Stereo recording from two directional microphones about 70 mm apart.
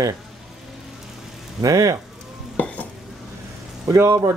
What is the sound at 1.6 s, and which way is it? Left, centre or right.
Speech, right.